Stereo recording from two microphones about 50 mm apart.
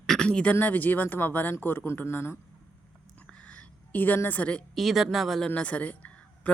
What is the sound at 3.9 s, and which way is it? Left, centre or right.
Speech, left.